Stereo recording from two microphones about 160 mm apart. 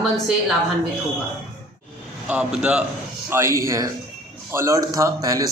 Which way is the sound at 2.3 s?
5° right (ahead or behind).